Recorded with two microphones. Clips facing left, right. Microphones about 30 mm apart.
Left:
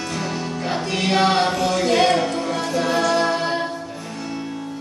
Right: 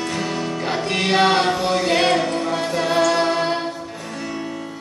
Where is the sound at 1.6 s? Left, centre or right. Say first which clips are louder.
Even; right.